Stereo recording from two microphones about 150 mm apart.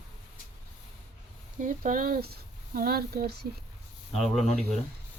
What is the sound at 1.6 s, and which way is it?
Speech, 65° right (ahead or behind).